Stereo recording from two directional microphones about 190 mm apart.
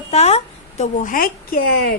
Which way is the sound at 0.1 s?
35° left (ahead or behind).